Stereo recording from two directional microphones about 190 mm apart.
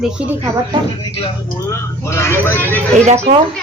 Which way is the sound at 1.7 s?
15° left (ahead or behind).